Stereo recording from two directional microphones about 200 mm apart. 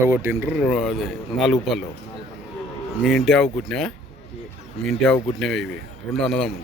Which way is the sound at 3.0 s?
Centre (ahead or behind).